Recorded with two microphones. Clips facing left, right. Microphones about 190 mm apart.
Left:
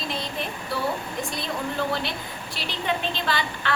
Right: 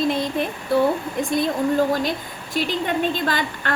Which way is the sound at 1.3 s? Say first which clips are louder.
Right 12 dB; 45° right (ahead or behind).